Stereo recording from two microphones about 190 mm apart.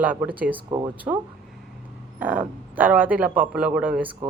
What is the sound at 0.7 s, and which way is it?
Speech, 25° right (ahead or behind).